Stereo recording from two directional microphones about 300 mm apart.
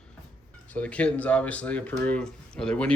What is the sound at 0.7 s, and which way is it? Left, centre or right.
Speech, centre.